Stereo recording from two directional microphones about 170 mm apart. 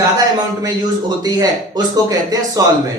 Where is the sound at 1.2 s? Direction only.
25° right (ahead or behind).